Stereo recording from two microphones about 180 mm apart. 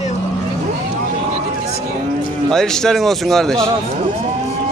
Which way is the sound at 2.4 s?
5° left (ahead or behind).